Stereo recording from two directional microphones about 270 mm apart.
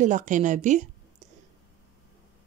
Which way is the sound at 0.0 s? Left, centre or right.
Right.